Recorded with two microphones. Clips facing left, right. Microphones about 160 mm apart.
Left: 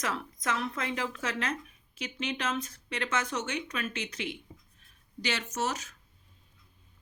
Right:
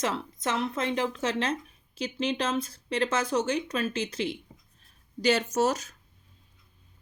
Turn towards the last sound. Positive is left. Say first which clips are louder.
# right 7 dB
turn(degrees=-35)  # may be behind; listen again after turning